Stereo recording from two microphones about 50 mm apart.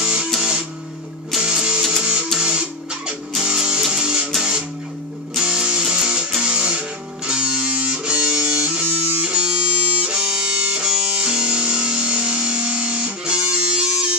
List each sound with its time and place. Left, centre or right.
0.0 s music: centre